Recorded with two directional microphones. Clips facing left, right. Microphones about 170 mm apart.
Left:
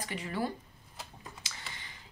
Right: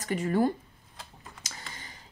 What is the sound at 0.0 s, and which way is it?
Speech, 45° right (ahead or behind).